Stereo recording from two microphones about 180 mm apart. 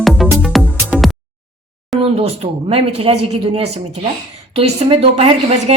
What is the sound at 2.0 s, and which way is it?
Speech, 35° right (ahead or behind).